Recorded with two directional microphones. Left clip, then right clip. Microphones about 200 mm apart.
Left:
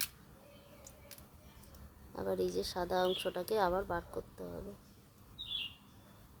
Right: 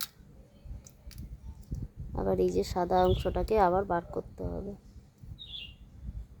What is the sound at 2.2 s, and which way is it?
Speech, 20° right (ahead or behind).